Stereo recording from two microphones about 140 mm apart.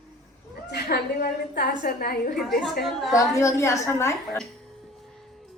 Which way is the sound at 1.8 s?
90° left.